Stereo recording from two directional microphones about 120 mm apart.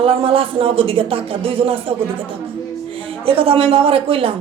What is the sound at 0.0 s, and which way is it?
A man's voice, 50° right (ahead or behind).